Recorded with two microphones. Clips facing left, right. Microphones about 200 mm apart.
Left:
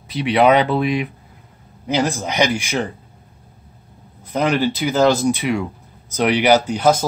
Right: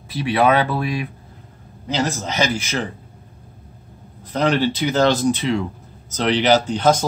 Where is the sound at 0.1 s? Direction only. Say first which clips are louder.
Left 3 dB; 15° left (ahead or behind).